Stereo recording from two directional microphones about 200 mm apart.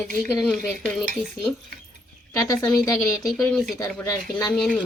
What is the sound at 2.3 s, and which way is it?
Speech, 15° left (ahead or behind).